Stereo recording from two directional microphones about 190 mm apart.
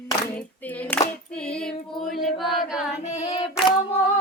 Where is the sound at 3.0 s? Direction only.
35° left (ahead or behind).